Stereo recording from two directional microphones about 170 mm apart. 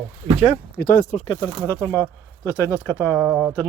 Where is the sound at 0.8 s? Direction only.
60° left (ahead or behind).